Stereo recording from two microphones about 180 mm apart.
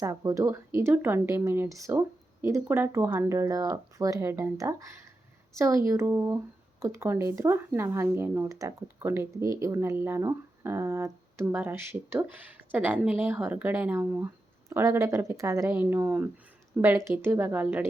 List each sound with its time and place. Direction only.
0.0 s speech: 20° right (ahead or behind)